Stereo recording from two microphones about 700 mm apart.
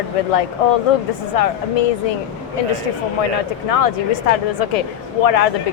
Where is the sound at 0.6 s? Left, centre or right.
Left.